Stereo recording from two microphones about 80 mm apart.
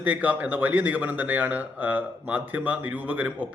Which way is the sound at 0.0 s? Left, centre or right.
Centre.